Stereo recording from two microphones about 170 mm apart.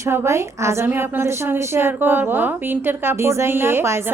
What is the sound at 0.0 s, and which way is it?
A woman's voice, 15° right (ahead or behind).